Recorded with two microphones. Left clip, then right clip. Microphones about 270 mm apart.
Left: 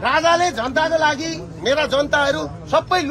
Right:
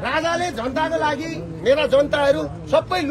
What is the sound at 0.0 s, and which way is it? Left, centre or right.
A man's voice, centre.